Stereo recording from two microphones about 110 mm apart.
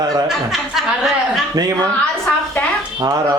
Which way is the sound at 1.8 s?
15° left (ahead or behind).